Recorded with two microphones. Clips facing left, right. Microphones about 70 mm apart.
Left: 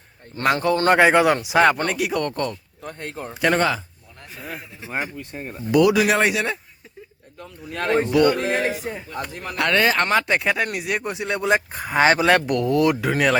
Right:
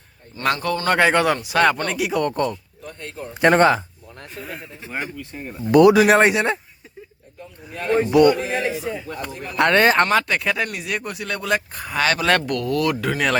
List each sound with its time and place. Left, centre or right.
0.4 s speech: centre
1.9 s speech: centre
2.2 s speech: centre
2.8 s speech: left
3.4 s speech: right
5.1 s speech: left
5.7 s speech: right
7.7 s speech: left
8.4 s speech: left
9.6 s speech: right
10.2 s speech: left
10.5 s speech: centre